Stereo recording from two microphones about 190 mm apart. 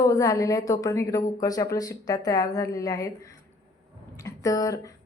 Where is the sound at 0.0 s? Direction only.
15° left (ahead or behind).